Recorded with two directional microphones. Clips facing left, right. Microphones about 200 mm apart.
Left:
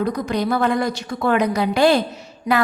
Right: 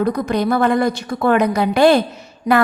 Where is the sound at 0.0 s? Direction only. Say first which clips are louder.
Right 3 dB; 55° right (ahead or behind).